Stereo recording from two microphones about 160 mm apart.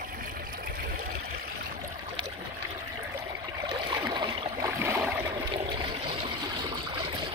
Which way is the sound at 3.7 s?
25° right (ahead or behind).